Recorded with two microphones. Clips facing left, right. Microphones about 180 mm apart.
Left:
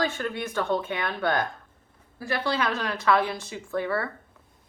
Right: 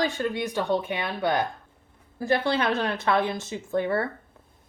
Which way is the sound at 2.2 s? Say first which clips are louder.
Right 3 dB; 25° right (ahead or behind).